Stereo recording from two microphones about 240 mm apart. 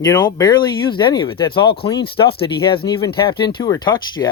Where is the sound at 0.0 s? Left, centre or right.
Centre.